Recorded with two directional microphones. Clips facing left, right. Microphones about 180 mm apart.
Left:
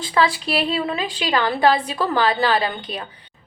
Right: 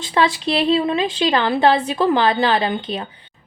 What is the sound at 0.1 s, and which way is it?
A woman's voice, 25° right (ahead or behind).